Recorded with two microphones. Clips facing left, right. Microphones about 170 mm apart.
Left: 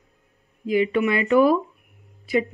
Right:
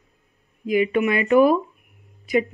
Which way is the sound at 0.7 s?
15° right (ahead or behind).